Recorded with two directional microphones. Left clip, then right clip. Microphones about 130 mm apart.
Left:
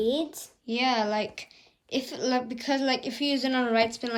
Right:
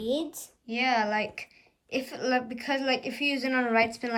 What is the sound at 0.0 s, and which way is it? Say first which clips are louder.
Speech: left 3 dB; 50° left (ahead or behind).